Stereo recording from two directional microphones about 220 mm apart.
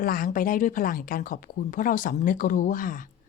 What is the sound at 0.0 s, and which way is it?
A woman's voice, 40° left (ahead or behind).